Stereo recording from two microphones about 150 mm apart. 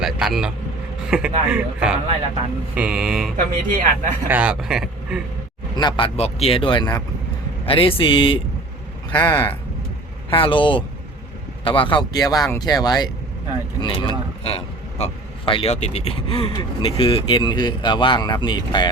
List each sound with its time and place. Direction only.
0.0 s speech: centre (ahead or behind)
3.3 s speech: 60° right (ahead or behind)
4.3 s speech: 10° right (ahead or behind)
5.7 s speech: 30° left (ahead or behind)
6.1 s speech: 45° left (ahead or behind)
9.1 s speech: 10° left (ahead or behind)
10.2 s speech: 35° left (ahead or behind)